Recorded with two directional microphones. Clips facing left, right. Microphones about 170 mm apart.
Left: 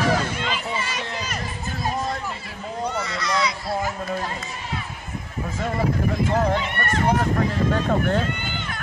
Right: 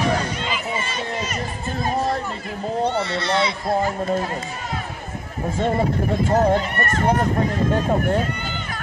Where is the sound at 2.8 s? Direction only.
30° right (ahead or behind).